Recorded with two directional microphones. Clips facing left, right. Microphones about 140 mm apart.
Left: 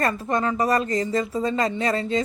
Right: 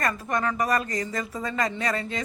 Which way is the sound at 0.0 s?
25° left (ahead or behind).